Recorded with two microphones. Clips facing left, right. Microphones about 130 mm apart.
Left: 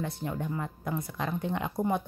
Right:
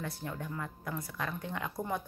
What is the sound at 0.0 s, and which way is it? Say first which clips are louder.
Speech: left 6 dB; 20° left (ahead or behind).